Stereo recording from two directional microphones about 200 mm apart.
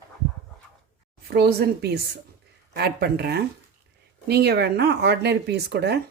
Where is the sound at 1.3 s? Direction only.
55° right (ahead or behind).